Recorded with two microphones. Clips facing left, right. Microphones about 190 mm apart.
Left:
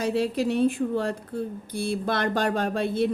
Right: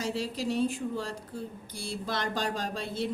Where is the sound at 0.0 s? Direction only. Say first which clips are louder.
Left 8 dB; 60° left (ahead or behind).